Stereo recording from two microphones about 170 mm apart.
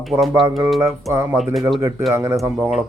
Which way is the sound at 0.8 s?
15° right (ahead or behind).